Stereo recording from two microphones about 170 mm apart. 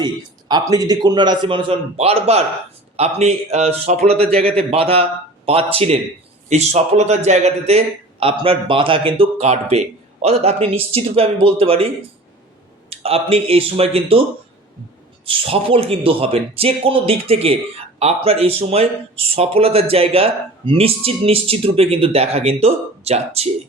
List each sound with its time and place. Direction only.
0.0 s a man's voice: 25° right (ahead or behind)
12.9 s speech: 35° right (ahead or behind)
15.2 s speech: 35° right (ahead or behind)